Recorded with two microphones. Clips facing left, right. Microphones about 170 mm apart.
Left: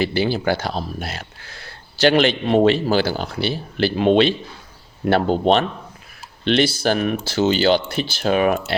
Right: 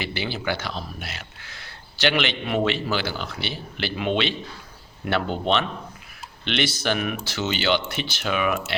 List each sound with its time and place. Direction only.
0.0 s speech: 40° left (ahead or behind)